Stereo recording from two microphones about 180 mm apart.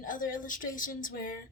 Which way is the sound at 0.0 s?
50° left (ahead or behind).